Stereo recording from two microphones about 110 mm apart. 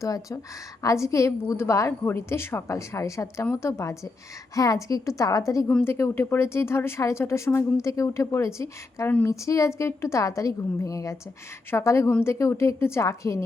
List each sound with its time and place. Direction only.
0.0 s a woman's voice: 30° left (ahead or behind)